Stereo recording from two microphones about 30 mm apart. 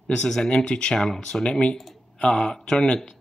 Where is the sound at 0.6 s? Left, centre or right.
Left.